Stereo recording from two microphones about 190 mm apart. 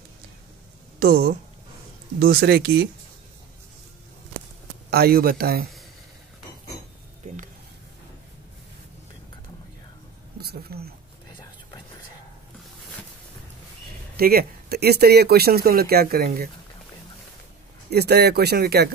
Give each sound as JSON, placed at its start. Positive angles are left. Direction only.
{"t": 0.9, "sound": "speech", "side_deg": -55}
{"t": 4.9, "sound": "speech", "side_deg": -55}
{"t": 10.3, "sound": "speech", "side_deg": -55}
{"t": 14.1, "sound": "speech", "side_deg": -55}
{"t": 17.8, "sound": "speech", "side_deg": -60}